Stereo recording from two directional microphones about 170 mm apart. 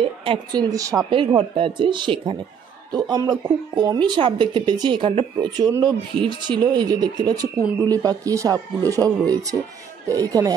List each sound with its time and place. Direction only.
0.0 s a woman's voice: 30° right (ahead or behind)
1.1 s speech: 30° right (ahead or behind)